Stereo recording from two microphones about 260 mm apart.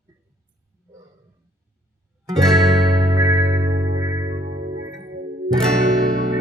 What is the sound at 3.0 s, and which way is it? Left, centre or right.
Music, centre.